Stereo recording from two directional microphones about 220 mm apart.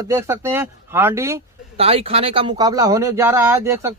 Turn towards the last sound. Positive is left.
turn(degrees=-10)  # may be behind; listen again after turning